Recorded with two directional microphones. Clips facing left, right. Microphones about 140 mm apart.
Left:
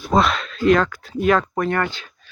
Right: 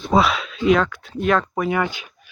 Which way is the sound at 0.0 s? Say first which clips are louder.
Even; 5° right (ahead or behind).